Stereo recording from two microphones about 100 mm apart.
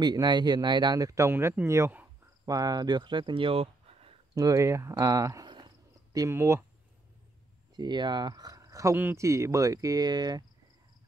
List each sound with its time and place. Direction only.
0.0 s speech: 45° right (ahead or behind); by 1.5 s 25° right (ahead or behind)
2.4 s speech: 40° right (ahead or behind); by 4.1 s 70° right (ahead or behind)
4.4 s speech: 35° right (ahead or behind)
7.7 s speech: 45° right (ahead or behind)
8.9 s speech: 20° right (ahead or behind)
9.2 s speech: 30° right (ahead or behind)